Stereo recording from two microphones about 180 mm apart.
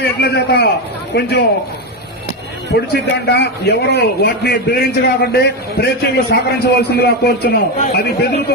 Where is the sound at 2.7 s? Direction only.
65° left (ahead or behind).